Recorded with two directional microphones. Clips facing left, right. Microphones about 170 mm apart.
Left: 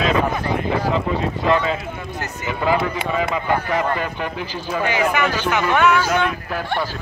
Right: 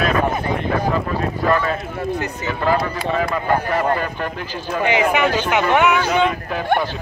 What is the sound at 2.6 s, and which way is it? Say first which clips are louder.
Speech: even; 10° left (ahead or behind).